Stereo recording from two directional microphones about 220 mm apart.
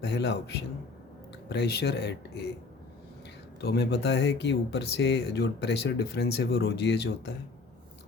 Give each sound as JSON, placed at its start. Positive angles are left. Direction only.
{"t": 0.0, "sound": "speech", "side_deg": 50}
{"t": 3.6, "sound": "speech", "side_deg": 45}